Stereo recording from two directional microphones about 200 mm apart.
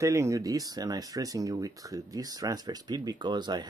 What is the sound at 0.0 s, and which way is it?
Speech, 15° right (ahead or behind).